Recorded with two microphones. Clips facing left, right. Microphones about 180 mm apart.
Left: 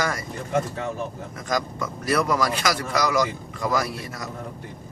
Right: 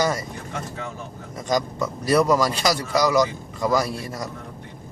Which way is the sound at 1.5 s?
25° right (ahead or behind).